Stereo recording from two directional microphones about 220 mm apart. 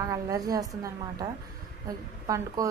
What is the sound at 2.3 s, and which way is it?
Speech, 15° right (ahead or behind).